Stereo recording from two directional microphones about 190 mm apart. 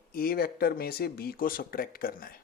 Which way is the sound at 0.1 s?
50° left (ahead or behind).